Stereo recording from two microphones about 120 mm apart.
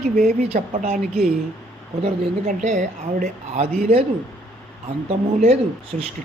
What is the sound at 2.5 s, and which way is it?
A woman's voice, 90° right.